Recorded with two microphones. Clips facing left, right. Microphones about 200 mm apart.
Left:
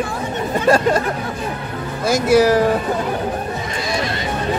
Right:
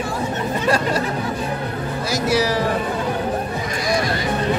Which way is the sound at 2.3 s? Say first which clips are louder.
Left 8 dB; 50° left (ahead or behind).